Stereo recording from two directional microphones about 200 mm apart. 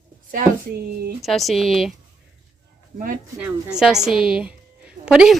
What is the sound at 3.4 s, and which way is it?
A woman's voice, 5° right (ahead or behind).